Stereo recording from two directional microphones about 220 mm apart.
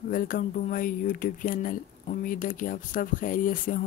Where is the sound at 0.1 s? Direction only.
40° left (ahead or behind).